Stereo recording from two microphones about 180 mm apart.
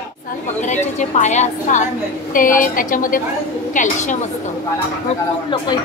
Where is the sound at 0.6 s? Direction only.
40° left (ahead or behind).